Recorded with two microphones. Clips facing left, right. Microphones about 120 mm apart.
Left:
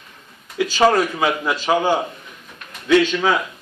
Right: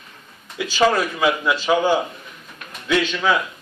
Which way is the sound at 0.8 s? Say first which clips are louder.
Left 1 dB; 40° left (ahead or behind).